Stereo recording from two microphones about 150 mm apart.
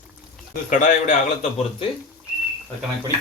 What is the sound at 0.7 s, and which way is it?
Speech, 55° left (ahead or behind).